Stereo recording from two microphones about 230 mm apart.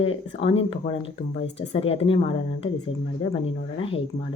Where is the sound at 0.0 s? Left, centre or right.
Left.